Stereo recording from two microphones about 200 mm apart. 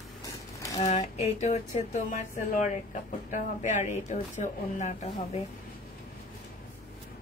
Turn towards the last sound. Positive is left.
turn(degrees=35)  # may be behind; listen again after turning